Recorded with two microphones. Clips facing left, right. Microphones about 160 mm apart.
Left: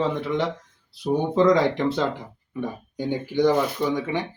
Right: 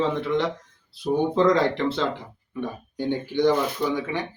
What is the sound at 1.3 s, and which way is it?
Speech, 15° left (ahead or behind).